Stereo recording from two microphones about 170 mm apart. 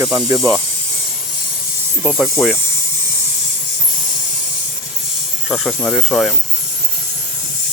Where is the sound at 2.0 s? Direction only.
Centre (ahead or behind).